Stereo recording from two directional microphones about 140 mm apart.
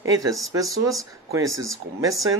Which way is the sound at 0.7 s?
Centre (ahead or behind).